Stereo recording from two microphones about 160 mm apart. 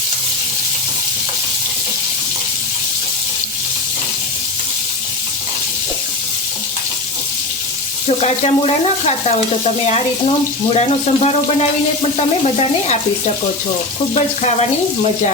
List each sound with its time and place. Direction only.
8.0 s sizzle: 40° left (ahead or behind)
10.7 s speech: 45° left (ahead or behind)
12.1 s sizzle: 40° left (ahead or behind)